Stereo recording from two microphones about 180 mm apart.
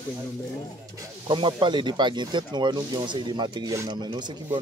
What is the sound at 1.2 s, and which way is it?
Speech, 25° right (ahead or behind).